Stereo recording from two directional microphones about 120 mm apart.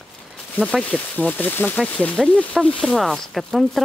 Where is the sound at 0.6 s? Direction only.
5° left (ahead or behind).